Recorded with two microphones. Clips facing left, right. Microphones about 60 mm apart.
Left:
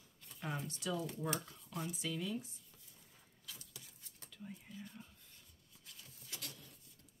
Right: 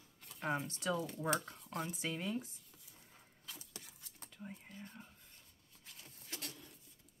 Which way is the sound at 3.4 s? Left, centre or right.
Right.